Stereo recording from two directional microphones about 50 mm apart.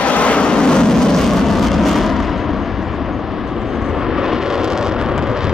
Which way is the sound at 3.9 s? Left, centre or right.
Centre.